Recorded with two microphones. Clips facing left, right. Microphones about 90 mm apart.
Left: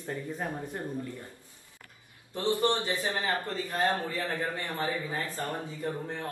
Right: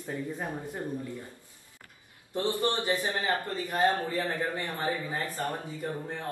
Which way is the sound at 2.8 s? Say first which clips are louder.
Right 2 dB; 20° right (ahead or behind).